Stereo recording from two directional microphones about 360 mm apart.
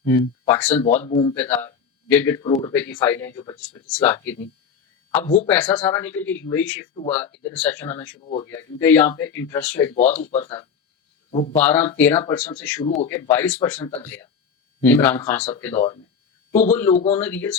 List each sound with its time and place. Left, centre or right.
0.0 s speech: centre
10.2 s a man's voice: centre
11.5 s a man's voice: centre